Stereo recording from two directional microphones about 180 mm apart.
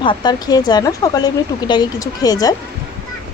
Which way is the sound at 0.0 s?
25° left (ahead or behind).